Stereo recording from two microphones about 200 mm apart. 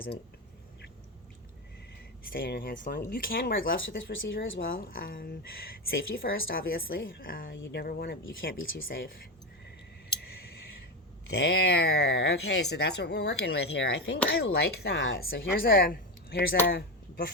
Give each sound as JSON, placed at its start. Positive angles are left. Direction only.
{"t": 2.3, "sound": "a woman's voice", "side_deg": 50}
{"t": 8.6, "sound": "speech", "side_deg": 70}
{"t": 11.3, "sound": "a woman's voice", "side_deg": 55}